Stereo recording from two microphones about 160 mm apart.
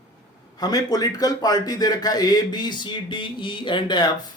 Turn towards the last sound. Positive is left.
turn(degrees=30)  # may be behind; listen again after turning